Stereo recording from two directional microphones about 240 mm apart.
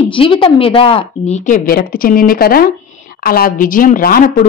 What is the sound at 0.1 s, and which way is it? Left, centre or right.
A woman's voice, left.